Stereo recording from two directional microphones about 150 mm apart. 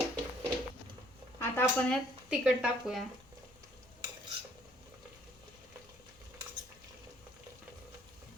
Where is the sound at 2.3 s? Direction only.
5° right (ahead or behind).